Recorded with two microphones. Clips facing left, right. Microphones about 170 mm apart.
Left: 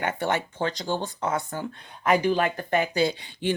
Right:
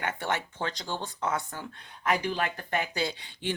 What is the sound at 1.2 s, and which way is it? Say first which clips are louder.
Speech: left 4 dB; 35° left (ahead or behind).